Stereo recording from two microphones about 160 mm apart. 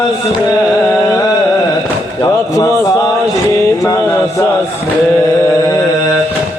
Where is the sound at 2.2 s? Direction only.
20° left (ahead or behind).